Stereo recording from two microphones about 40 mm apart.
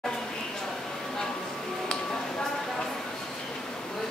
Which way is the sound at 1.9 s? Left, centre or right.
Centre.